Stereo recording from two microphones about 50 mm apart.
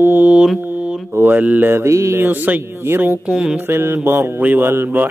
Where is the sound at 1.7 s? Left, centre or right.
Right.